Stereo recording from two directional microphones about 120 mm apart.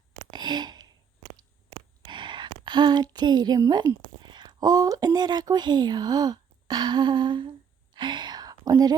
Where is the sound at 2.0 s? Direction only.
40° right (ahead or behind).